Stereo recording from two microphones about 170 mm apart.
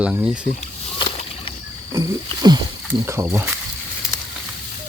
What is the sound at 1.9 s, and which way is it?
Speech, 20° right (ahead or behind).